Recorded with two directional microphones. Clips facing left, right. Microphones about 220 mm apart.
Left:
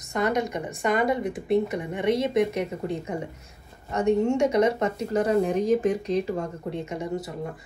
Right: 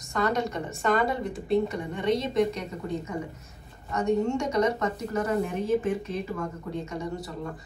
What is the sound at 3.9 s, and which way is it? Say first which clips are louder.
Speech: left 3 dB; 30° left (ahead or behind).